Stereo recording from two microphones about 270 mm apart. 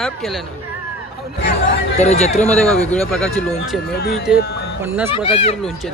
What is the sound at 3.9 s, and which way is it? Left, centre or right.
Speech, left.